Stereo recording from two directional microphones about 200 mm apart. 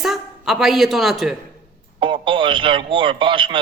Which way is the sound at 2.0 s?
25° right (ahead or behind).